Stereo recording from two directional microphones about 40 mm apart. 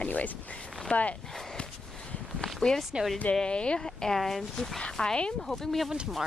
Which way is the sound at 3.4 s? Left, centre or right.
Left.